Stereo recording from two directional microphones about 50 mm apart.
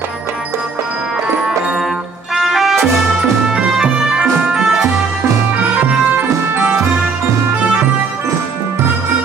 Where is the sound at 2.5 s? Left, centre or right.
Centre.